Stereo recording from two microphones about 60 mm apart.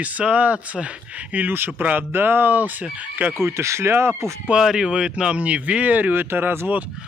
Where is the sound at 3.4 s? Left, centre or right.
Right.